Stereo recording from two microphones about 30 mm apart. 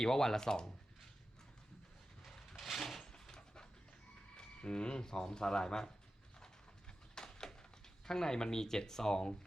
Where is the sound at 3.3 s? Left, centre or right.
Left.